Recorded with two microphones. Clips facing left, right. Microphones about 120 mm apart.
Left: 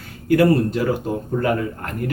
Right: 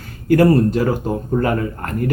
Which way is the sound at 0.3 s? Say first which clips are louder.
Right 3 dB; 40° right (ahead or behind).